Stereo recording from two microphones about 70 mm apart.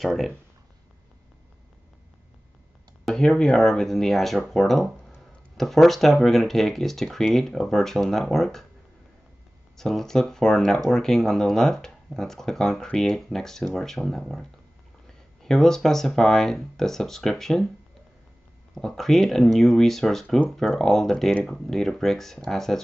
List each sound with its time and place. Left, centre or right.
0.0 s speech: centre
3.1 s speech: centre
9.8 s speech: centre
15.4 s speech: centre
18.8 s speech: centre